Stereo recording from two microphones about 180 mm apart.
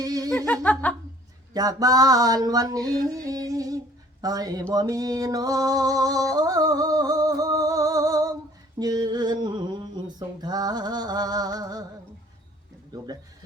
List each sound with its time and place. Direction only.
0.0 s music: 20° right (ahead or behind)
0.3 s speech: 10° left (ahead or behind)
1.5 s a sound: 20° right (ahead or behind)